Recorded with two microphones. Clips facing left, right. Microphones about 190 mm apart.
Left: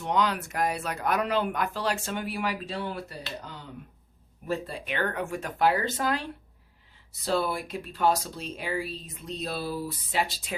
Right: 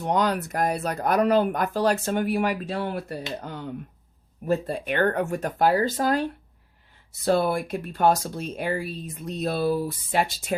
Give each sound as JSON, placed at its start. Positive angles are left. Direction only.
{"t": 0.0, "sound": "speech", "side_deg": -45}
{"t": 4.4, "sound": "speech", "side_deg": -45}
{"t": 7.3, "sound": "speech", "side_deg": -50}